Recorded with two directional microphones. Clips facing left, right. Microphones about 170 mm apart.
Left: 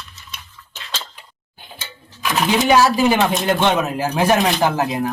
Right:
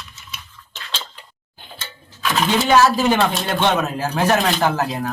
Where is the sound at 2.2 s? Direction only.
15° left (ahead or behind).